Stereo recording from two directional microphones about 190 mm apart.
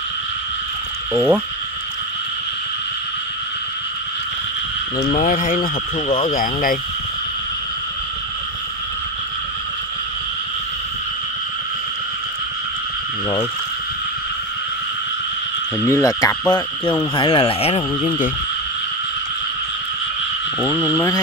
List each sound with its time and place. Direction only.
1.1 s speech: 5° right (ahead or behind)
4.9 s speech: 45° left (ahead or behind)
6.0 s speech: 25° left (ahead or behind)
6.3 s speech: 45° left (ahead or behind)
15.8 s frog: 15° left (ahead or behind)
17.1 s speech: 25° left (ahead or behind)
20.6 s frog: 10° left (ahead or behind)